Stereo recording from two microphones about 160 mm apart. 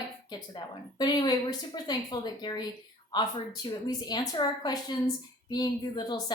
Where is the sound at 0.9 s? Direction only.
25° left (ahead or behind).